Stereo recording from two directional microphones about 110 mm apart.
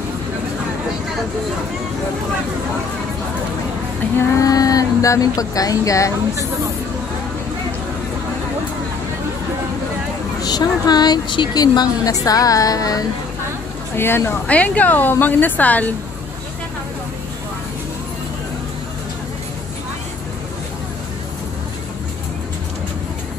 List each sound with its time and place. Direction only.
4.2 s a woman's voice: 30° left (ahead or behind)
10.4 s a woman's voice: 40° left (ahead or behind)
13.9 s a woman's voice: 20° left (ahead or behind)